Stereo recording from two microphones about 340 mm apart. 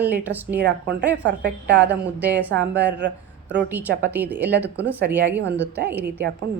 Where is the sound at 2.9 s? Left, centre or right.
Right.